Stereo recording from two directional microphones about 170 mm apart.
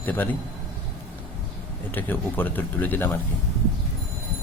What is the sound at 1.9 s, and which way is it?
Speech, 10° left (ahead or behind).